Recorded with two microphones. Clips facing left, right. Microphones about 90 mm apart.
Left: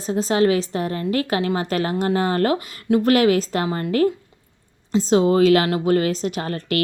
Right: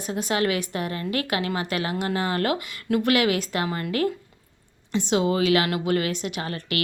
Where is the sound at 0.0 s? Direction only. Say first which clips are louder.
Left 6 dB; 30° left (ahead or behind).